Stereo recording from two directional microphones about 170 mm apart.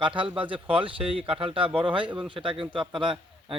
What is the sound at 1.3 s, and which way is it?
Speech, 30° right (ahead or behind).